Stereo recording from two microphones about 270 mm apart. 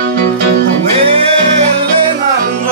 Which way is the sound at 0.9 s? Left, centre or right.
Right.